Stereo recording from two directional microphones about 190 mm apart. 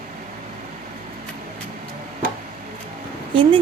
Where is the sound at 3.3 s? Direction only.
25° right (ahead or behind).